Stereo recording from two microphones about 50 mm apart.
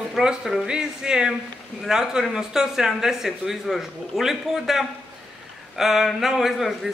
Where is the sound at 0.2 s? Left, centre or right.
Centre.